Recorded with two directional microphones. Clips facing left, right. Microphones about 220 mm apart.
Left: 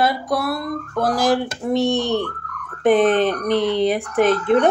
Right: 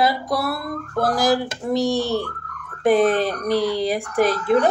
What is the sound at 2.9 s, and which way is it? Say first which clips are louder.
Speech: left 2 dB; 40° right (ahead or behind).